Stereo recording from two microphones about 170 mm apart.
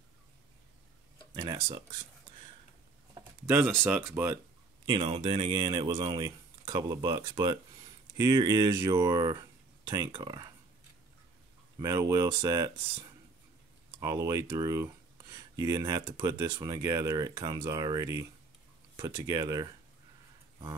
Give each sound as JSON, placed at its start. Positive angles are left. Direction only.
{"t": 1.3, "sound": "speech", "side_deg": -20}
{"t": 3.4, "sound": "speech", "side_deg": -10}
{"t": 4.8, "sound": "speech", "side_deg": -30}
{"t": 11.8, "sound": "speech", "side_deg": -20}